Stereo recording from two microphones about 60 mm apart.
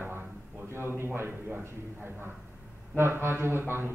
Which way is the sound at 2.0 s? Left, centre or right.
Right.